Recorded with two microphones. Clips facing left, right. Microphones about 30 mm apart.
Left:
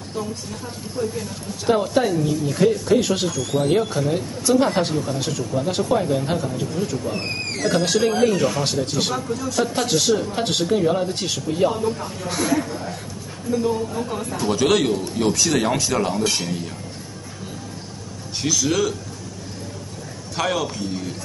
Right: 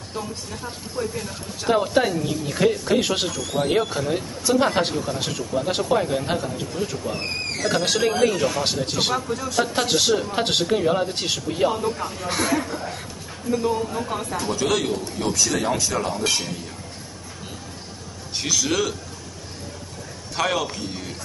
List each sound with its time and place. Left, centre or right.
1.1 s speech: centre
3.9 s speech: centre
14.5 s speech: centre
18.4 s speech: centre
20.3 s speech: centre